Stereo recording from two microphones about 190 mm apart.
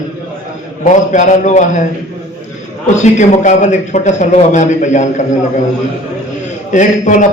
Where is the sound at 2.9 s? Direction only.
40° left (ahead or behind).